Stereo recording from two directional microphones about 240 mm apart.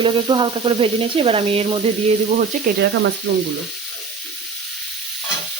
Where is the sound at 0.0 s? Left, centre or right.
Right.